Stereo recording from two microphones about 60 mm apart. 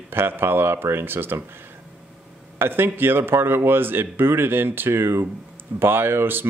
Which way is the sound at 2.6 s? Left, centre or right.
Right.